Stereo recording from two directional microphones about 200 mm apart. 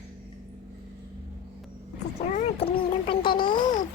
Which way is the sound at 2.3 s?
35° left (ahead or behind).